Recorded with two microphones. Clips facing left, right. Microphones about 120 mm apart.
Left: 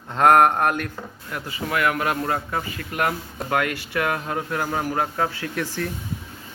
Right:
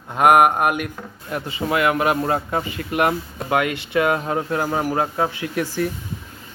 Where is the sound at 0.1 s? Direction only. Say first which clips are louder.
Right 1 dB; 10° right (ahead or behind).